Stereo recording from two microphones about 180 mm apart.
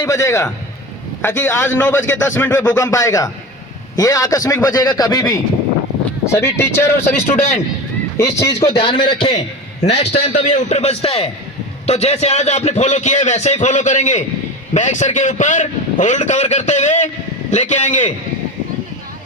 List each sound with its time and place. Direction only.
0.0 s a man's voice: 15° left (ahead or behind)
6.4 s a man's voice: 15° left (ahead or behind)
8.5 s a man's voice: 30° left (ahead or behind)